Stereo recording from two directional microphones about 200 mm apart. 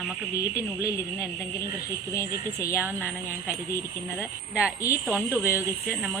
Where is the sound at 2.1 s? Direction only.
15° left (ahead or behind).